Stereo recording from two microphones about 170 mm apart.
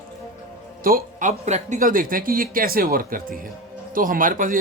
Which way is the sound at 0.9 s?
60° right (ahead or behind).